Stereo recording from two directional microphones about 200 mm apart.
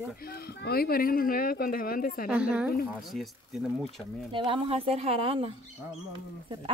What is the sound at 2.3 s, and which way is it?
Speech, 5° right (ahead or behind).